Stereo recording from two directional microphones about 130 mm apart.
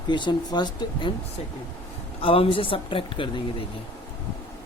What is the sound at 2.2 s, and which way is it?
Speech, 45° left (ahead or behind).